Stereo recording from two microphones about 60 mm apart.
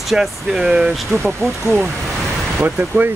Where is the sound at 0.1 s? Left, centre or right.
Centre.